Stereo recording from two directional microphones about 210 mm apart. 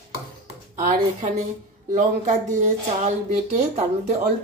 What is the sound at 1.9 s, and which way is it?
Speech, 35° right (ahead or behind).